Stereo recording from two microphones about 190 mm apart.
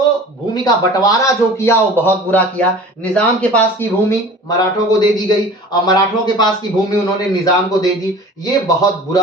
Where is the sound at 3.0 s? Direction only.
5° left (ahead or behind).